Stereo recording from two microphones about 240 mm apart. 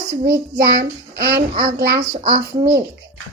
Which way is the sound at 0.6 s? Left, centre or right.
Right.